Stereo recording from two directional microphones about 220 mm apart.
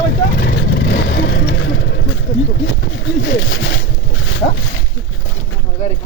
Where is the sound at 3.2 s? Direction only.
60° left (ahead or behind).